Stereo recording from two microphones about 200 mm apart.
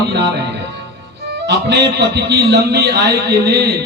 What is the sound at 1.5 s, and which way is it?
A man's voice, 60° right (ahead or behind).